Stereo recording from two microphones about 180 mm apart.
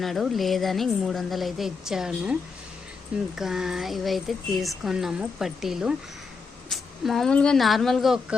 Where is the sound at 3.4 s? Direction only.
5° right (ahead or behind).